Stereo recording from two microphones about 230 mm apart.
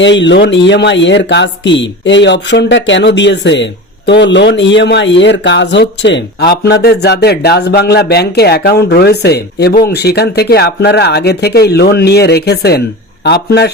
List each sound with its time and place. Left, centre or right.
0.0 s speech: left